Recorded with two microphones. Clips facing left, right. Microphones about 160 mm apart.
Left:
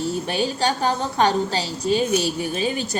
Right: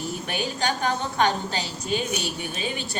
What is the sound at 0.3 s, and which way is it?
A woman's voice, 30° left (ahead or behind).